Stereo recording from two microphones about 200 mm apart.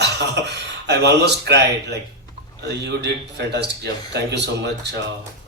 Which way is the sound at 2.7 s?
55° right (ahead or behind).